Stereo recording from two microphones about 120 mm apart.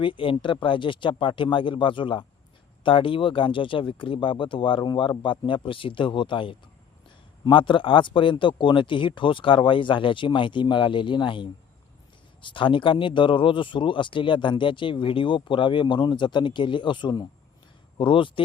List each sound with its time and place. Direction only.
0.0 s speech: 45° left (ahead or behind)